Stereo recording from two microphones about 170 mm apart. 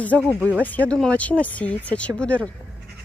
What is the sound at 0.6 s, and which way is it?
Speech, 10° left (ahead or behind).